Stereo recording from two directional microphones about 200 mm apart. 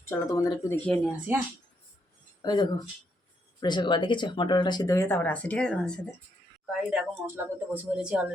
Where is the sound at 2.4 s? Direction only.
20° left (ahead or behind); by 8.3 s 5° right (ahead or behind).